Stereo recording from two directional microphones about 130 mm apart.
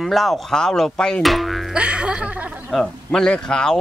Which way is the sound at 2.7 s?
5° left (ahead or behind).